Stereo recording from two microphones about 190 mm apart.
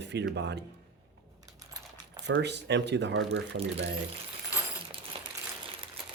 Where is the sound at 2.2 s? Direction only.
65° right (ahead or behind).